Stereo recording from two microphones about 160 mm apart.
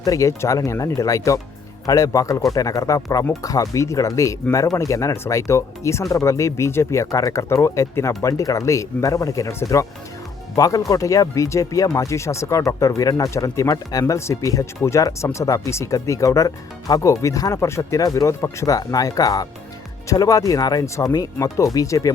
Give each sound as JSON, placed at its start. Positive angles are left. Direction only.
{"t": 0.0, "sound": "speech", "side_deg": 20}